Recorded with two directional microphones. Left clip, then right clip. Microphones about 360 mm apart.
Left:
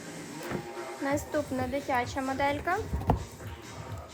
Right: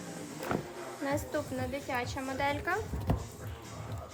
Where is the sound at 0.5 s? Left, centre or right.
Centre.